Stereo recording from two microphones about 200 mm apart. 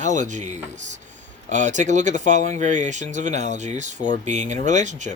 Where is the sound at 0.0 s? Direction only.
35° right (ahead or behind).